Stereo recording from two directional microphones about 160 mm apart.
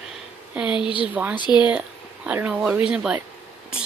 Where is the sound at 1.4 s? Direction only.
30° left (ahead or behind).